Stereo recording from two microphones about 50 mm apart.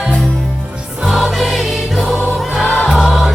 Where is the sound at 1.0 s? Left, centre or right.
Centre.